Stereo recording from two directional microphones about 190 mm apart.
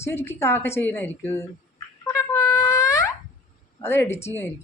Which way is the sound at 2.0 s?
15° left (ahead or behind).